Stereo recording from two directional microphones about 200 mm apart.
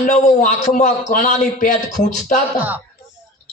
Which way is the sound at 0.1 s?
40° left (ahead or behind).